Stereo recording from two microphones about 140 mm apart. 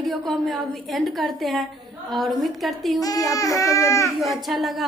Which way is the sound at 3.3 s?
25° left (ahead or behind).